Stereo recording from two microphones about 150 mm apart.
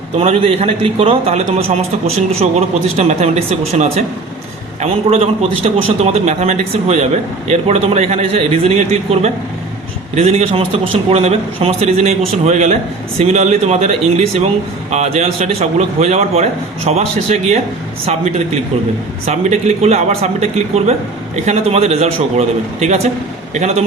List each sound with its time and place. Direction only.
0.2 s a man's voice: 45° right (ahead or behind)